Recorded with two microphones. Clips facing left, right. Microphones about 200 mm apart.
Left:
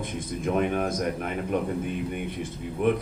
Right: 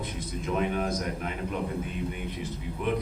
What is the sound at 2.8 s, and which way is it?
Speech, 55° left (ahead or behind).